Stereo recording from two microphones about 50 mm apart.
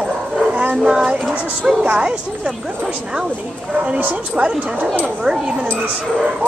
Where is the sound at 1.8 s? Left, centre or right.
Right.